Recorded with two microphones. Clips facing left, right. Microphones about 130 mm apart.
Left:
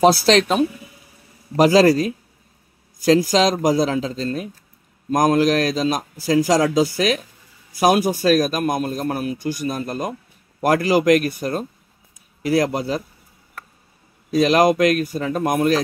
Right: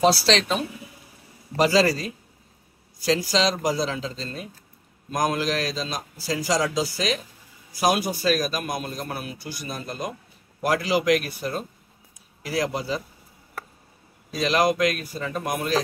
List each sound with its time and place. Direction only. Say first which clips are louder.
0.0 s a man's voice: left 6 dB; 50° left (ahead or behind)
1.6 s a man's voice: left 7 dB; 50° left (ahead or behind)
14.4 s a man's voice: left 6 dB; 50° left (ahead or behind)